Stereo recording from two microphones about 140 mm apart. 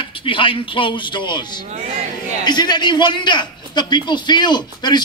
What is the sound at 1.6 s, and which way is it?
Speech, 50° right (ahead or behind).